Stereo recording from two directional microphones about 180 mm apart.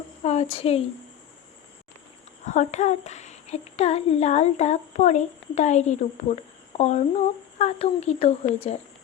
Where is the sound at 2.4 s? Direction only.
40° left (ahead or behind).